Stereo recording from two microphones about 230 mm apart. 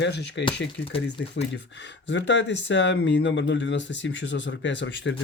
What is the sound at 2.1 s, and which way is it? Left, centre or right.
Speech, left.